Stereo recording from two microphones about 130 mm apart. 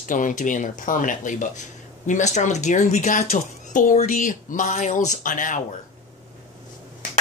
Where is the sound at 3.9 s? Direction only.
70° left (ahead or behind).